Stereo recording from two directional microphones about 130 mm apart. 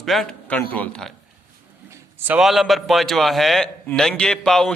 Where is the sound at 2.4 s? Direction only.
Centre (ahead or behind).